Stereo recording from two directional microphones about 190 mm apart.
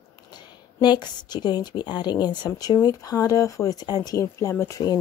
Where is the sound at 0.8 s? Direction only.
25° left (ahead or behind).